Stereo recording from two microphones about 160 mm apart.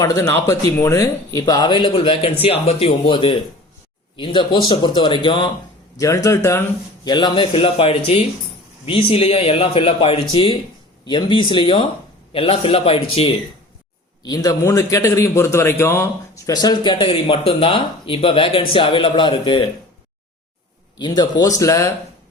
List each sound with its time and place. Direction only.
0.0 s a man's voice: 20° left (ahead or behind); by 13.3 s 35° left (ahead or behind)
14.3 s a man's voice: 25° left (ahead or behind)
21.0 s a man's voice: 25° left (ahead or behind)